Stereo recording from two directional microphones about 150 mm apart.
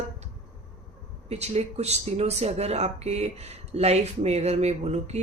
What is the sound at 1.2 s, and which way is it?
Speech, 45° right (ahead or behind).